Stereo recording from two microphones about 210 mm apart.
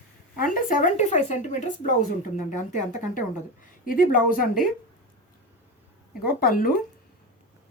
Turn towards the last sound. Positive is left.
turn(degrees=45)  # may be behind; listen again after turning